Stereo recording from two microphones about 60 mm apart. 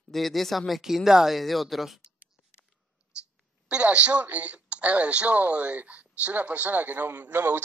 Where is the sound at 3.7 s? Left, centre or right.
Right.